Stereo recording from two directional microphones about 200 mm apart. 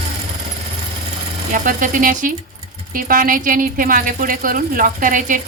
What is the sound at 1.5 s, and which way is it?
Speech, 40° right (ahead or behind).